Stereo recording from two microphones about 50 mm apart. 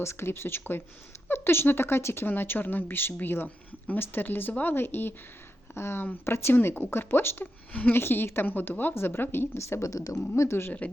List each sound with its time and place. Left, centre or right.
0.0 s speech: left
2.2 s speech: left
5.7 s speech: left
7.7 s speech: left
7.9 s speech: left
9.6 s speech: left